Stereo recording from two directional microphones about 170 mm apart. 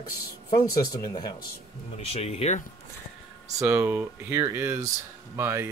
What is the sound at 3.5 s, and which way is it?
Speech, 15° right (ahead or behind).